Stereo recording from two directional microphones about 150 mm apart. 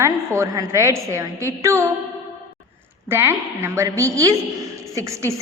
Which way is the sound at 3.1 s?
15° right (ahead or behind).